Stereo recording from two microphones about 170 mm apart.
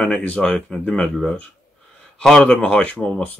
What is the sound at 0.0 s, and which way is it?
Speech, 5° left (ahead or behind).